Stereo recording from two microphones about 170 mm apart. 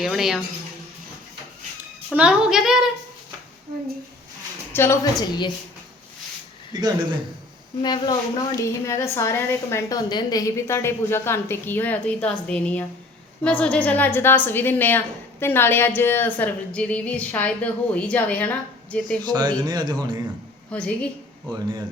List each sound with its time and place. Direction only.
0.0 s a woman's voice: centre (ahead or behind)
2.0 s a woman's voice: 5° right (ahead or behind)
4.7 s a woman's voice: 15° left (ahead or behind)
7.8 s a woman's voice: 25° left (ahead or behind); by 19.2 s 5° left (ahead or behind)
19.3 s a man's voice: 25° right (ahead or behind)
20.7 s a woman's voice: 5° left (ahead or behind)